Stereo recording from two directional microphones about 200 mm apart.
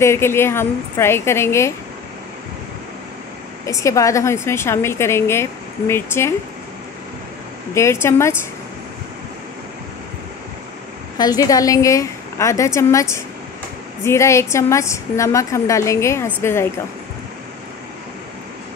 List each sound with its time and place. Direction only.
0.0 s a woman's voice: 10° left (ahead or behind)
3.6 s a woman's voice: 15° left (ahead or behind)
7.7 s a woman's voice: 15° left (ahead or behind)
11.1 s a woman's voice: 20° left (ahead or behind)